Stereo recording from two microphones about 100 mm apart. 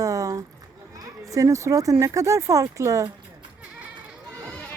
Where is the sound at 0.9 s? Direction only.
35° right (ahead or behind).